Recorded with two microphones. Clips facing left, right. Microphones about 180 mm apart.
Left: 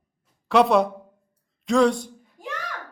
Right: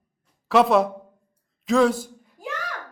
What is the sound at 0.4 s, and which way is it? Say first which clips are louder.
Speech: even; centre (ahead or behind).